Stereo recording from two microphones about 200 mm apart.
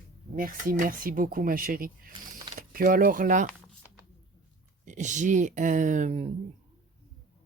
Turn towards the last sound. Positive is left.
turn(degrees=-35)  # may be behind; listen again after turning